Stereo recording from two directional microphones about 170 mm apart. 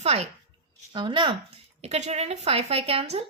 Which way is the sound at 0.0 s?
40° right (ahead or behind).